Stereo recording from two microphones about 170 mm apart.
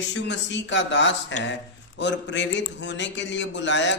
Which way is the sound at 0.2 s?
90° left.